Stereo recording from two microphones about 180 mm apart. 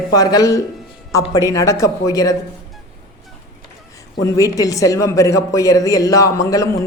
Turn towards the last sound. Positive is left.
turn(degrees=20)  # may be behind; listen again after turning